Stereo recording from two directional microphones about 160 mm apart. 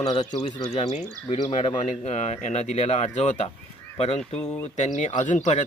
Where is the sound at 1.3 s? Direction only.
35° left (ahead or behind).